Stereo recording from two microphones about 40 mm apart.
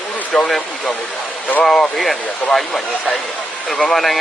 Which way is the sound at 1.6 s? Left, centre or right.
Centre.